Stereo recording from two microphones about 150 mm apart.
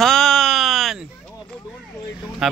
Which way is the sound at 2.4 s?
5° right (ahead or behind).